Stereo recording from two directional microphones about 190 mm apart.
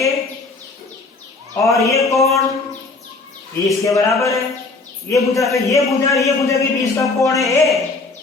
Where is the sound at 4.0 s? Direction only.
15° left (ahead or behind).